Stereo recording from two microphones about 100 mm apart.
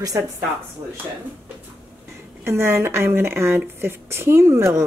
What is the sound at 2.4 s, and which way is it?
Speech, 25° right (ahead or behind).